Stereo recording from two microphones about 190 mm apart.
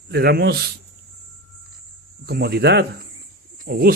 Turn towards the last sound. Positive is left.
turn(degrees=-50)  # may be behind; listen again after turning